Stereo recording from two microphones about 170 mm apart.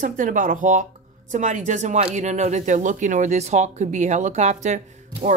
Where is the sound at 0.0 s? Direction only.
50° right (ahead or behind).